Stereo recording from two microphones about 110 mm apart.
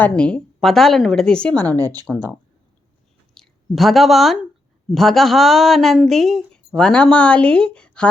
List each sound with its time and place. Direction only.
0.0 s a woman's voice: 10° left (ahead or behind)
1.6 s speech: 35° right (ahead or behind)
3.3 s a woman's voice: centre (ahead or behind)